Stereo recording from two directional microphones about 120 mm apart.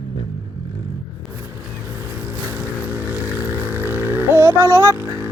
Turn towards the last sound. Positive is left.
turn(degrees=-20)  # may be behind; listen again after turning